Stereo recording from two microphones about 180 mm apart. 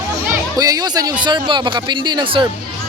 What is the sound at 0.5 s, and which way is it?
Speech, 20° right (ahead or behind).